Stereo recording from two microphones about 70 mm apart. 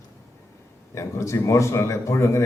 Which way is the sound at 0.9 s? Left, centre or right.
Left.